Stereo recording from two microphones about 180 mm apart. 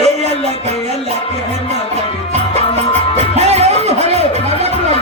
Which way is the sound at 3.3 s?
35° right (ahead or behind).